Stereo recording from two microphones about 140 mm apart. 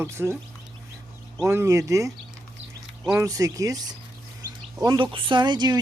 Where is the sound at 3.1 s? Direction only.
25° right (ahead or behind).